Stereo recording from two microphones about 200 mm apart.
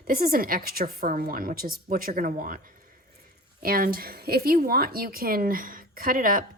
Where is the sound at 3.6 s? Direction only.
45° right (ahead or behind).